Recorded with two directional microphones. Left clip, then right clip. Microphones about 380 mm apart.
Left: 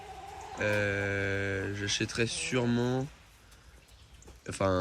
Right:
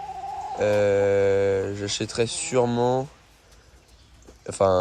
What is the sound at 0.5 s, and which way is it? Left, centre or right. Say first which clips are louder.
Speech: right 10 dB; centre.